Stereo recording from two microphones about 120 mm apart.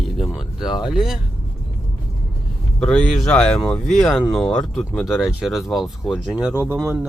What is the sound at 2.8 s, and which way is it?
Speech, 10° left (ahead or behind).